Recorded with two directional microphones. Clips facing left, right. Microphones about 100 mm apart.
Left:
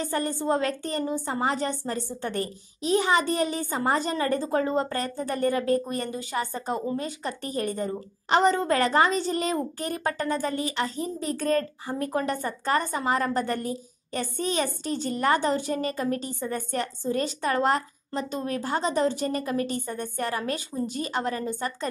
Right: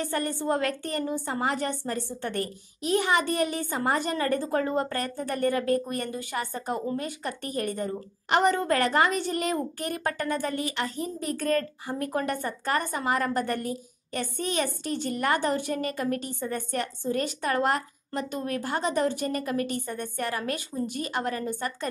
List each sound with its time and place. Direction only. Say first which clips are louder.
0.0 s speech: left 1 dB; 25° left (ahead or behind)